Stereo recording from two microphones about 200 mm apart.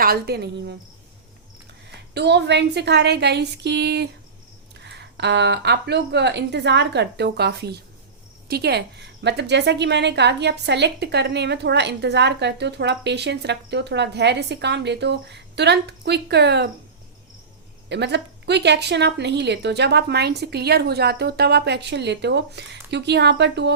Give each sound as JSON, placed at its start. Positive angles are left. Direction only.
{"t": 0.0, "sound": "speech", "side_deg": -50}
{"t": 2.1, "sound": "a woman's voice", "side_deg": -60}
{"t": 17.8, "sound": "a woman's voice", "side_deg": -60}